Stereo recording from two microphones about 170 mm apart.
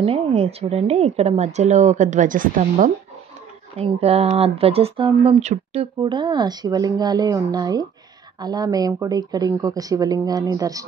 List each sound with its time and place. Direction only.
0.0 s a woman's voice: 35° right (ahead or behind); by 2.9 s 55° right (ahead or behind)
3.7 s speech: 35° right (ahead or behind); by 10.9 s 20° right (ahead or behind)